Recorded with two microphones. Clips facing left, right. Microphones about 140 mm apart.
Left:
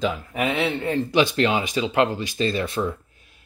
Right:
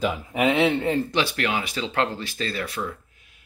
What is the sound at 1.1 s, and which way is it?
Speech, 20° left (ahead or behind).